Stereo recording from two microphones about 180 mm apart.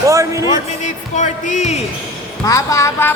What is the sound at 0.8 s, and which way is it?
Speech, 45° left (ahead or behind).